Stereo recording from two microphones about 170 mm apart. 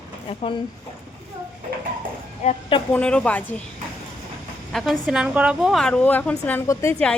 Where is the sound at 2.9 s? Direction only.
5° left (ahead or behind).